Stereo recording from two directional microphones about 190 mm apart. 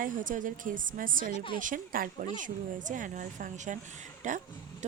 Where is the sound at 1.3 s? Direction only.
30° left (ahead or behind).